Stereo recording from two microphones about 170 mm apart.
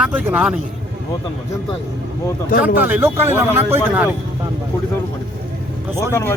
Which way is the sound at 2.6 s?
10° right (ahead or behind).